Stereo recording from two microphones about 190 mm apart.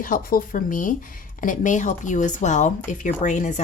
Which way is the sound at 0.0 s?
45° left (ahead or behind).